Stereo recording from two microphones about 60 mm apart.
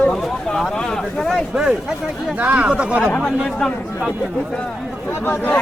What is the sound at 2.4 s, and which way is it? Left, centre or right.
Speech, right.